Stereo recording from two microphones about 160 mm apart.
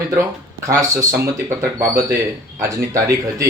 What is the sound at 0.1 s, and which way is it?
Speech, 20° right (ahead or behind).